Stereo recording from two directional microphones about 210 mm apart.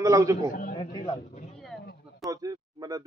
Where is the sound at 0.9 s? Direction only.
20° left (ahead or behind).